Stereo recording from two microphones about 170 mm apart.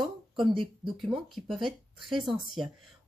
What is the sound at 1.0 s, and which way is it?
Speech, centre (ahead or behind).